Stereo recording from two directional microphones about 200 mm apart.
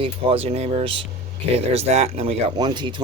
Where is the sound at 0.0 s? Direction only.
30° right (ahead or behind).